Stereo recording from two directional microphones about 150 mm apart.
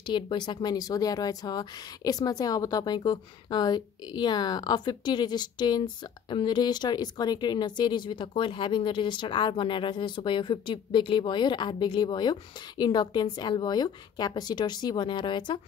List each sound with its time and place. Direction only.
0.0 s speech: 30° left (ahead or behind)